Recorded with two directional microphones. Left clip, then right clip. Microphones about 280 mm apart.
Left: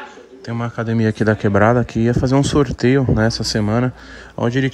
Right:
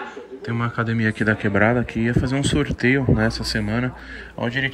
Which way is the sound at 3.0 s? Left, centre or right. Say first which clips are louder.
Left 3 dB; right.